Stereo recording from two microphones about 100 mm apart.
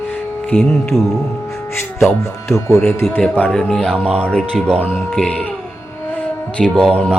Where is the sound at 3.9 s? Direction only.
15° right (ahead or behind).